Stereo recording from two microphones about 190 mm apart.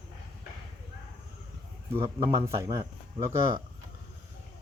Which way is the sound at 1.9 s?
15° right (ahead or behind).